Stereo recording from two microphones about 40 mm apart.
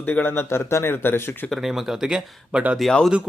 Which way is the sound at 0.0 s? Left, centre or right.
Left.